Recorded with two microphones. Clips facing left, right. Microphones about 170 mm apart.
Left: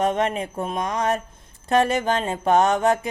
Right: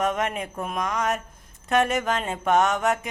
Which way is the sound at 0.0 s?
30° left (ahead or behind).